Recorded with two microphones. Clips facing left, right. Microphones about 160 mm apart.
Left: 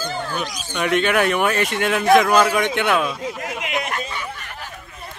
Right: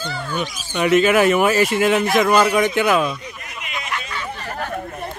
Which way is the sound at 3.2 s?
90° left.